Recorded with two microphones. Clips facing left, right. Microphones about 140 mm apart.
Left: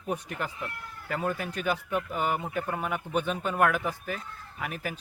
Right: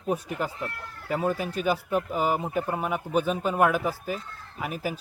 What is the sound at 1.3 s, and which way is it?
Speech, 30° right (ahead or behind).